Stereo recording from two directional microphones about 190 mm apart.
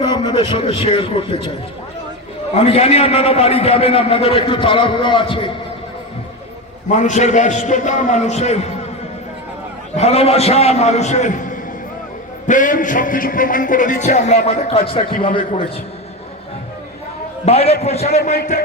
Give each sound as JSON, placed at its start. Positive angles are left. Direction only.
{"t": 0.1, "sound": "a man's voice", "side_deg": 25}
{"t": 2.6, "sound": "a man's voice", "side_deg": 35}
{"t": 6.9, "sound": "a man's voice", "side_deg": 40}
{"t": 9.9, "sound": "a man's voice", "side_deg": 35}
{"t": 17.4, "sound": "a man's voice", "side_deg": 30}